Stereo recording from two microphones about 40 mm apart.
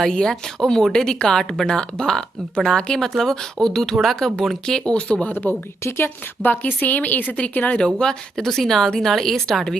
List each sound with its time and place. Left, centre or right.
0.0 s a woman's voice: centre
5.5 s a woman's voice: left
7.3 s speech: left
7.8 s speech: left
8.4 s a woman's voice: centre